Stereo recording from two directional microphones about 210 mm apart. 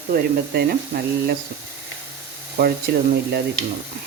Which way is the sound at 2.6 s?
45° right (ahead or behind).